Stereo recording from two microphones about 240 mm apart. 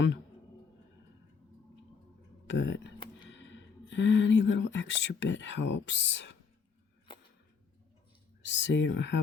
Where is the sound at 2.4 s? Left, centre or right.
Left.